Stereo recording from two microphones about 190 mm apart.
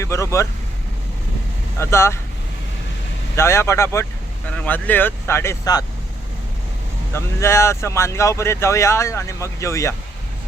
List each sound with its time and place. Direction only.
0.0 s speech: 15° left (ahead or behind)
1.8 s speech: 15° left (ahead or behind)
3.3 s speech: 15° left (ahead or behind)
7.1 s speech: 15° left (ahead or behind)